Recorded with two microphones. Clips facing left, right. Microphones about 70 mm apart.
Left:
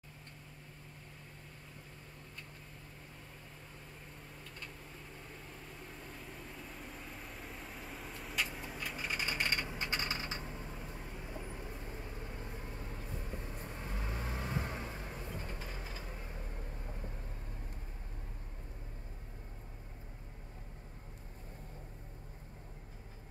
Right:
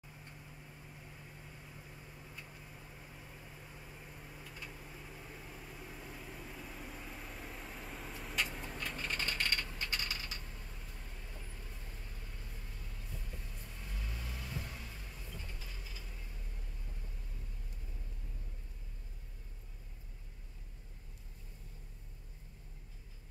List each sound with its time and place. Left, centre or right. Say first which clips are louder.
3.7 s vehicle: even; centre; by 17.1 s left